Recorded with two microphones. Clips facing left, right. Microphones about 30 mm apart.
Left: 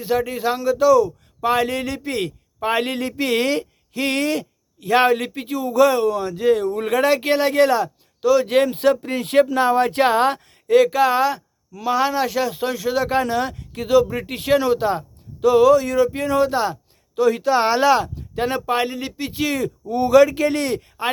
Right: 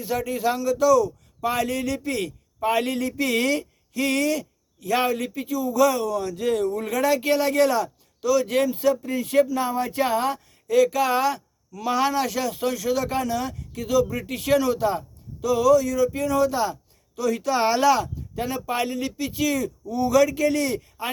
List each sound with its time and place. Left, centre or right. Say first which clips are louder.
0.0 s a man's voice: left 4 dB; left
5.8 s speech: left 5 dB; left
6.7 s a man's voice: left 4 dB; left
8.7 s a man's voice: left 4 dB; left
13.2 s a man's voice: left 5 dB; left
18.1 s a man's voice: left 6 dB; left